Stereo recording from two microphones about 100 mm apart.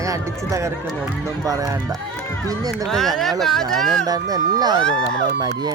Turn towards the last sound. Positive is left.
turn(degrees=5)  # may be behind; listen again after turning